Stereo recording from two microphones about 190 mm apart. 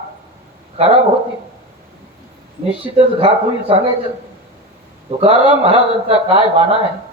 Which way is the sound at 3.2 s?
30° right (ahead or behind).